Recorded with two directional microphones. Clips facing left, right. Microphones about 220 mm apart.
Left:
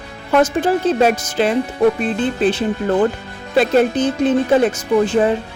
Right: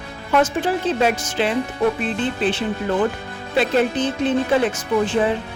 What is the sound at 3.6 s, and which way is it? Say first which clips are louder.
A woman's voice: left 4 dB; 45° left (ahead or behind).